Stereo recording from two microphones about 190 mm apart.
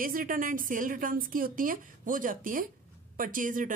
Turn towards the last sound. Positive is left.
turn(degrees=-45)  # may be behind; listen again after turning